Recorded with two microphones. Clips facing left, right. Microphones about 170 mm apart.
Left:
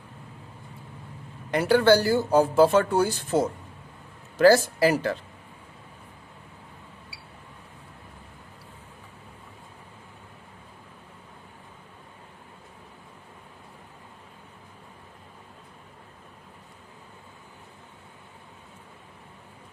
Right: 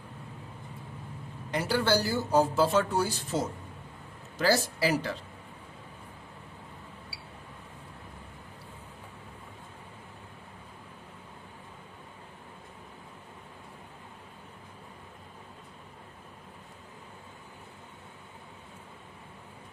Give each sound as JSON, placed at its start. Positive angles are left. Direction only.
{"t": 1.5, "sound": "speech", "side_deg": 60}